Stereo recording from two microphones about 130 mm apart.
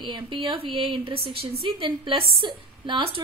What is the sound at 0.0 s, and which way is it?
A woman's voice, 40° right (ahead or behind).